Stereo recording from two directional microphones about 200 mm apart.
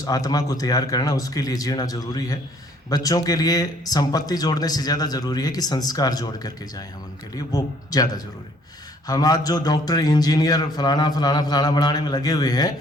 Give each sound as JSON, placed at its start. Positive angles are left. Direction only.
{"t": 0.0, "sound": "speech", "side_deg": 20}